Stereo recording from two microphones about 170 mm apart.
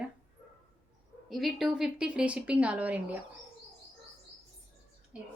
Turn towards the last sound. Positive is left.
turn(degrees=-5)  # may be behind; listen again after turning